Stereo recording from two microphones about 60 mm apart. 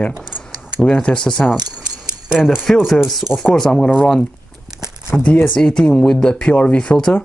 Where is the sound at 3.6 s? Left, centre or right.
Centre.